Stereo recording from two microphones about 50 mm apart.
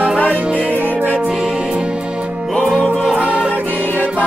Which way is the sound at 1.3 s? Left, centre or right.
Centre.